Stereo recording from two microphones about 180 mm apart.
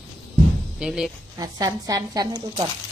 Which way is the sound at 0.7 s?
5° right (ahead or behind).